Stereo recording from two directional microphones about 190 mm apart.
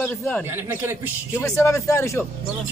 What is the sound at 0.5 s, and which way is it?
Speech, 10° right (ahead or behind).